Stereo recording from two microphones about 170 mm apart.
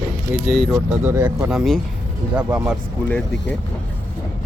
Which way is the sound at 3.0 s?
10° left (ahead or behind).